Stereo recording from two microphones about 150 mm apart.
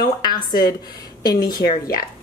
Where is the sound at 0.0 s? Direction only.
30° left (ahead or behind).